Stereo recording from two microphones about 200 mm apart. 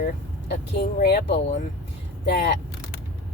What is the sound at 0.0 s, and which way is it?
Speech, 55° left (ahead or behind).